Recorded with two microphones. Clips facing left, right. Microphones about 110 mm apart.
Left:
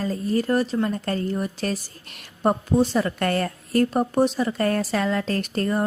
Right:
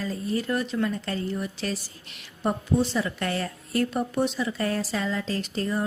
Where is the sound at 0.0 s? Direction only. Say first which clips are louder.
Left 5 dB; 45° left (ahead or behind).